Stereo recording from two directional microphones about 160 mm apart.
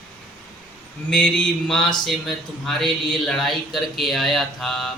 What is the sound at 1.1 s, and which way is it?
A man's voice, 5° left (ahead or behind).